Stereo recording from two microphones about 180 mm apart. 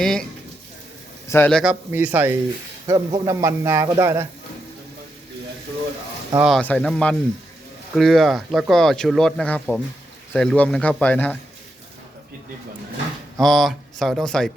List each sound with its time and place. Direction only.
0.0 s speech: 5° left (ahead or behind)
1.3 s speech: 10° left (ahead or behind)
1.9 s a man's voice: 10° right (ahead or behind)
6.4 s a man's voice: 5° left (ahead or behind)
13.4 s speech: centre (ahead or behind)